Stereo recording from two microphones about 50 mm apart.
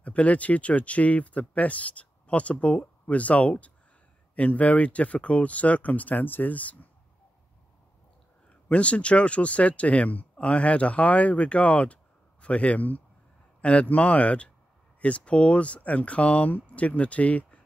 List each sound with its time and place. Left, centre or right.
0.0 s speech: left
8.5 s speech: left